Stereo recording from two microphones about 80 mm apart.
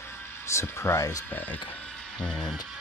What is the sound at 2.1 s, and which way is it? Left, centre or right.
Speech, centre.